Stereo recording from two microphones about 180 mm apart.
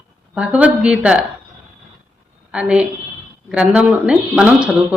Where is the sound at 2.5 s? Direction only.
5° right (ahead or behind).